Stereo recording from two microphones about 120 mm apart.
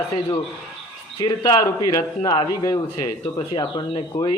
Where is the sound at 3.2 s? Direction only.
45° left (ahead or behind).